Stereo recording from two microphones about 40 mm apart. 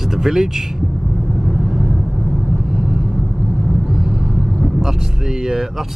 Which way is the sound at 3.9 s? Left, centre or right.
Centre.